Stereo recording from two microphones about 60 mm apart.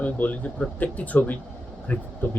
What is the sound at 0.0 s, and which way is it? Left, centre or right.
Speech, left.